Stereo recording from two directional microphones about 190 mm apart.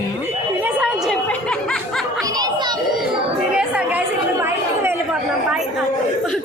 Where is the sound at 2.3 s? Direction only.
20° right (ahead or behind).